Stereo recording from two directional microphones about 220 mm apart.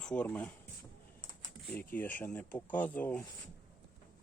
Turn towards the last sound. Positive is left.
turn(degrees=5)  # may be behind; listen again after turning